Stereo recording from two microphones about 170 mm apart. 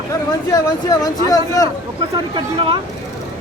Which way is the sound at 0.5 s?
20° left (ahead or behind).